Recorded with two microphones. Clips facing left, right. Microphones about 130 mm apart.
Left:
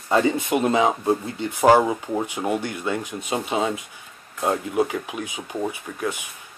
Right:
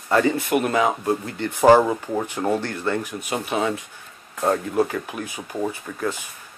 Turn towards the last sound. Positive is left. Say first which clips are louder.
# right 1 dB
turn(degrees=15)  # may be behind; listen again after turning